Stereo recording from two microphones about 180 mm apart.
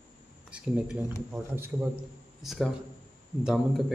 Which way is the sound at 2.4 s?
Centre (ahead or behind).